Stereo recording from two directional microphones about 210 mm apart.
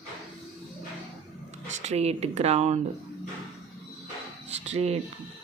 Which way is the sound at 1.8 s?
30° right (ahead or behind).